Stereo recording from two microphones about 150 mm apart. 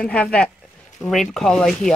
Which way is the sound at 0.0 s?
5° left (ahead or behind).